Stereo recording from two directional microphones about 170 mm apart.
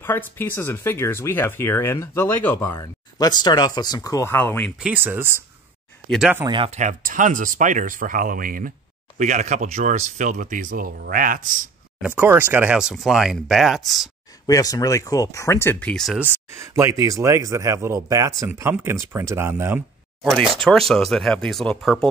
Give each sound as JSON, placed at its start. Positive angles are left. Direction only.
{"t": 0.0, "sound": "speech", "side_deg": 15}
{"t": 4.8, "sound": "speech", "side_deg": -10}
{"t": 6.0, "sound": "speech", "side_deg": 0}
{"t": 6.3, "sound": "speech", "side_deg": -25}
{"t": 6.7, "sound": "speech", "side_deg": -45}
{"t": 12.2, "sound": "speech", "side_deg": -10}
{"t": 14.4, "sound": "speech", "side_deg": 20}
{"t": 16.2, "sound": "speech", "side_deg": -15}
{"t": 20.6, "sound": "speech", "side_deg": 0}